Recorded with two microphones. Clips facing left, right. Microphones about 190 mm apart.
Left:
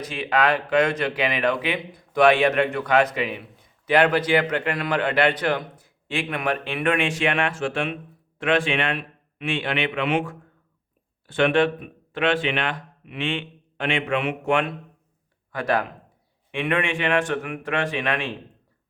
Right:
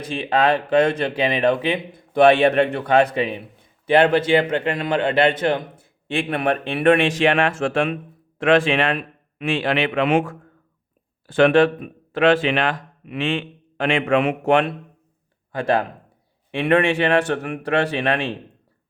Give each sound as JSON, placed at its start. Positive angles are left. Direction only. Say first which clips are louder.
{"t": 0.0, "sound": "a man's voice", "louder": "right 3 dB", "side_deg": -30}